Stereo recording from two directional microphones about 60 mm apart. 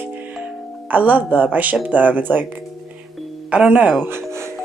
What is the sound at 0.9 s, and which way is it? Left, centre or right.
Speech, right.